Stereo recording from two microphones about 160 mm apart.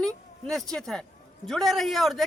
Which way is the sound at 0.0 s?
5° left (ahead or behind).